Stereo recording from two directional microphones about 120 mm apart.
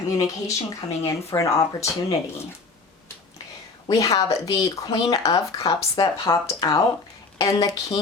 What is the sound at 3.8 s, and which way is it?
Speech, 30° left (ahead or behind).